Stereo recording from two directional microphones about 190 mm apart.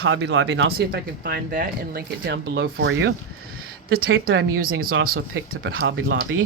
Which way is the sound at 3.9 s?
55° right (ahead or behind).